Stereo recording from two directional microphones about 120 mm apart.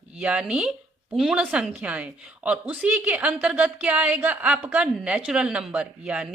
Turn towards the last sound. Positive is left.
turn(degrees=-10)  # may be behind; listen again after turning